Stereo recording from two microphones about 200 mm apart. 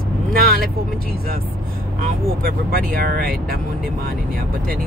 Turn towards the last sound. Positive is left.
turn(degrees=-50)  # may be behind; listen again after turning